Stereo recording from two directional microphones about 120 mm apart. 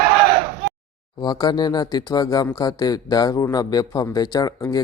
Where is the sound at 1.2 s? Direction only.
35° left (ahead or behind).